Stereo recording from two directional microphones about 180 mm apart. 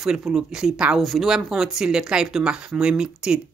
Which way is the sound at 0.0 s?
5° right (ahead or behind).